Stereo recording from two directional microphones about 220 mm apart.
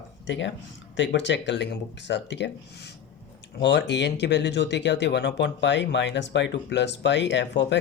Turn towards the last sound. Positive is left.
turn(degrees=50)  # may be behind; listen again after turning